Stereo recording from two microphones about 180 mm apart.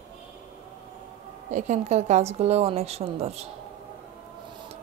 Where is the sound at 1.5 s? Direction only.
40° right (ahead or behind).